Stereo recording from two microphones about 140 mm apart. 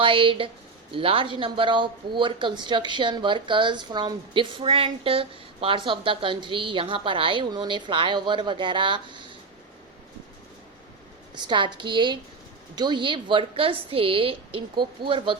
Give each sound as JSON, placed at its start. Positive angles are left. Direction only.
{"t": 0.0, "sound": "speech", "side_deg": -40}
{"t": 11.3, "sound": "speech", "side_deg": -35}